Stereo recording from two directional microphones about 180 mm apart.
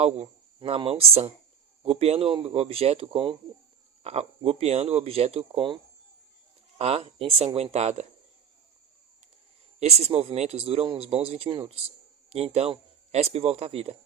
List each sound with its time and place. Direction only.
0.0 s speech: 35° right (ahead or behind)
9.8 s speech: 35° right (ahead or behind)